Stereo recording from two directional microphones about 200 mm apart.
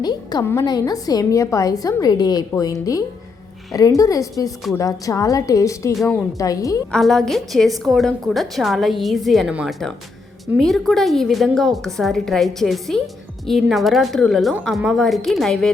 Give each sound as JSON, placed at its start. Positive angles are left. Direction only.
{"t": 0.0, "sound": "a woman's voice", "side_deg": 20}
{"t": 6.9, "sound": "a woman's voice", "side_deg": 0}